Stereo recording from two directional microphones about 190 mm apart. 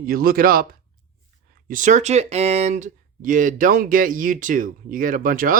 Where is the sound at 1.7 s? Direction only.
40° right (ahead or behind).